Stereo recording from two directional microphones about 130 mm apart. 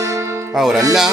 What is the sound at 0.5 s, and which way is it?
Speech, centre (ahead or behind).